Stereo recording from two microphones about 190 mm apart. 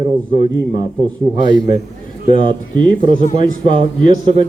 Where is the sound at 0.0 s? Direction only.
25° right (ahead or behind).